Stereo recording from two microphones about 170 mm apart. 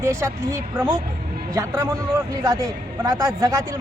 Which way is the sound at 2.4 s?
20° right (ahead or behind).